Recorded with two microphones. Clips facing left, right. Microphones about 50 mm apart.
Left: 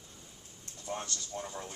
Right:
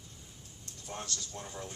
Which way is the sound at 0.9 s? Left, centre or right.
Centre.